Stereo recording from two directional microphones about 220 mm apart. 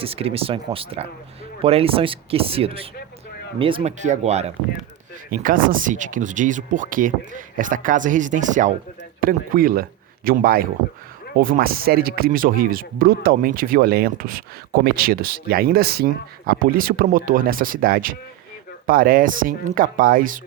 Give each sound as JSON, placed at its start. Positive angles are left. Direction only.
{"t": 0.0, "sound": "speech", "side_deg": -25}
{"t": 5.3, "sound": "speech", "side_deg": -40}